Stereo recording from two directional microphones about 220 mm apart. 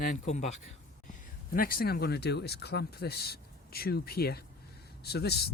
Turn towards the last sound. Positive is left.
turn(degrees=45)  # may be behind; listen again after turning